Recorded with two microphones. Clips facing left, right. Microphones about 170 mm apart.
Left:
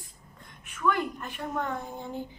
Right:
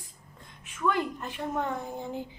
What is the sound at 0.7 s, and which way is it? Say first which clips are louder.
A woman's voice: even; 20° right (ahead or behind).